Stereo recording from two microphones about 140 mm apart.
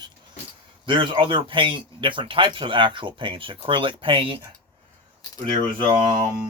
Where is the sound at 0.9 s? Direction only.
35° right (ahead or behind).